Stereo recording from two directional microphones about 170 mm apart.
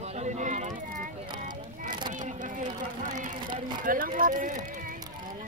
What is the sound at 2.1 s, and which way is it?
Speech, 50° right (ahead or behind).